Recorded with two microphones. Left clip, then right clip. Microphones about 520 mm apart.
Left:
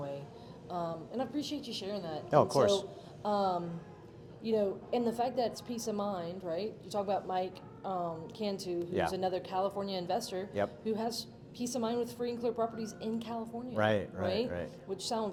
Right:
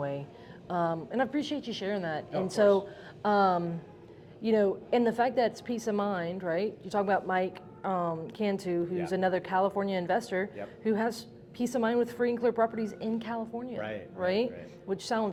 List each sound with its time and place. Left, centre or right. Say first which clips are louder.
0.7 s a woman's voice: right 7 dB; right
3.2 s a woman's voice: right 6 dB; right
13.7 s speech: left 10 dB; left
14.3 s a woman's voice: right 7 dB; right